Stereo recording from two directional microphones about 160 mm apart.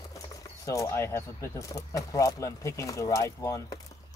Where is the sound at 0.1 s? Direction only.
20° left (ahead or behind).